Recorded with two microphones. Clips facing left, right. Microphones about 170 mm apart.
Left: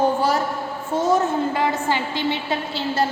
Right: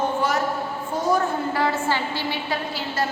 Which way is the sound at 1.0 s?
25° left (ahead or behind).